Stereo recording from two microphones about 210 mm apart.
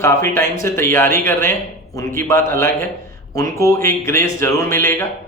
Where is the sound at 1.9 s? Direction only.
15° left (ahead or behind).